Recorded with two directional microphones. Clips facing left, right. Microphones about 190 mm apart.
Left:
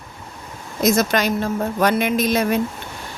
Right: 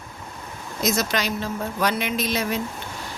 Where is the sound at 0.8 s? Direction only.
55° left (ahead or behind).